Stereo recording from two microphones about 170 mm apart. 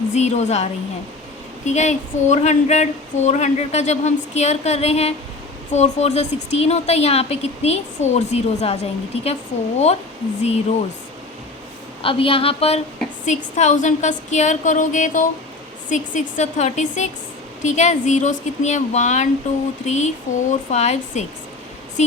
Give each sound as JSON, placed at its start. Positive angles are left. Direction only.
{"t": 0.1, "sound": "a woman's voice", "side_deg": 40}
{"t": 12.0, "sound": "a woman's voice", "side_deg": 35}
{"t": 20.5, "sound": "a woman's voice", "side_deg": 40}